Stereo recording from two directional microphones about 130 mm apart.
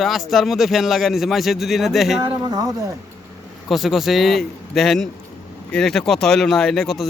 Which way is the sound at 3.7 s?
Centre (ahead or behind).